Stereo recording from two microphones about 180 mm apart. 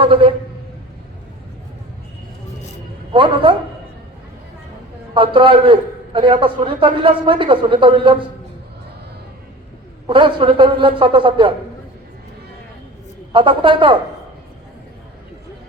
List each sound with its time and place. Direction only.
0.0 s a man's voice: 30° right (ahead or behind)
3.1 s a man's voice: 30° right (ahead or behind)
5.1 s a man's voice: 30° right (ahead or behind)
10.1 s a man's voice: 30° right (ahead or behind)
13.3 s a man's voice: 30° right (ahead or behind)